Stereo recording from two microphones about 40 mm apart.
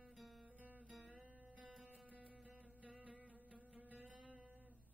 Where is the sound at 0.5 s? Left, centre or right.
Right.